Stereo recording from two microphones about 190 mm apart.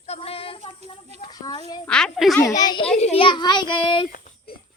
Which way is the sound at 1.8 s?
5° left (ahead or behind).